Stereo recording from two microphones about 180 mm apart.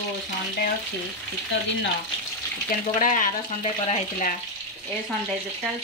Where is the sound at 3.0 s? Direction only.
45° left (ahead or behind).